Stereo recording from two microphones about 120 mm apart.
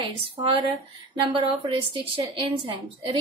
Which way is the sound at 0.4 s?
45° right (ahead or behind).